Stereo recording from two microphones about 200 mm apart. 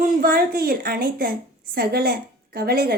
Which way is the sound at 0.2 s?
45° right (ahead or behind).